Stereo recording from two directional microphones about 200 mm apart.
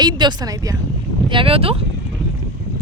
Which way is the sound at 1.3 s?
25° right (ahead or behind).